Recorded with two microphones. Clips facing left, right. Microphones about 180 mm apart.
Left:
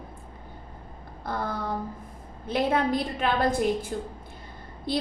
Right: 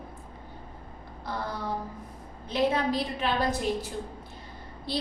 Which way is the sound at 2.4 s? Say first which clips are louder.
Left 1 dB; 55° left (ahead or behind).